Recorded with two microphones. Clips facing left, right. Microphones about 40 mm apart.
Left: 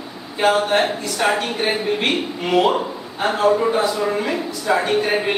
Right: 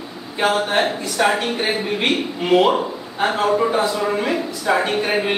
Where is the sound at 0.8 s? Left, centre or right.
Centre.